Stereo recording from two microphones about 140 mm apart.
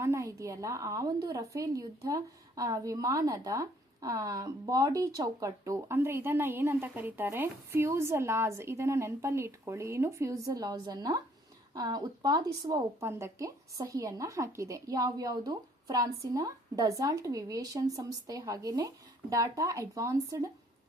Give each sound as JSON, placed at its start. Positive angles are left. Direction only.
{"t": 0.0, "sound": "a woman's voice", "side_deg": -20}